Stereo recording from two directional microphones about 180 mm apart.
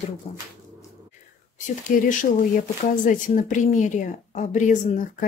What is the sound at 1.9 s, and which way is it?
Speech, 50° left (ahead or behind).